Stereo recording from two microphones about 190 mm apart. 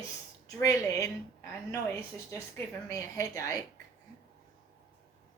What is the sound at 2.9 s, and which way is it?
Speech, 15° left (ahead or behind).